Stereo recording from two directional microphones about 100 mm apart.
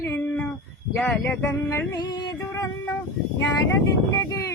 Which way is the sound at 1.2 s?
20° left (ahead or behind).